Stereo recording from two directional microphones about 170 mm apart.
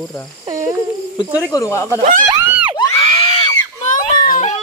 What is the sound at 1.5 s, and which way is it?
Speech, 20° left (ahead or behind).